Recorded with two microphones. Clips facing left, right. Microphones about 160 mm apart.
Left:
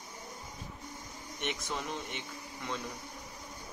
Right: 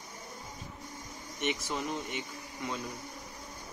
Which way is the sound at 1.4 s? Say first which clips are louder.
Right 4 dB; centre (ahead or behind).